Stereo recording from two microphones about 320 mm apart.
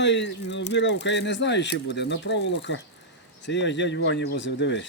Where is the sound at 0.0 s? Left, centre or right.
Left.